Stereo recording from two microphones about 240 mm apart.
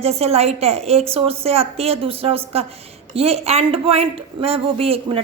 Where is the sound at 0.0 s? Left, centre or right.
Right.